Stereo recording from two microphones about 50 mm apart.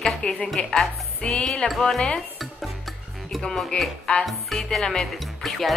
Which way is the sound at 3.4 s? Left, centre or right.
Centre.